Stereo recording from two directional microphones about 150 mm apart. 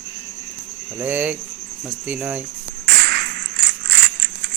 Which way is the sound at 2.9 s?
90° right.